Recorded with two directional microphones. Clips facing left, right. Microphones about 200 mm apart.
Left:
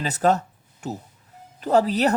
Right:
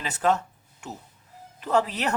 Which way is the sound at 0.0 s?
40° left (ahead or behind).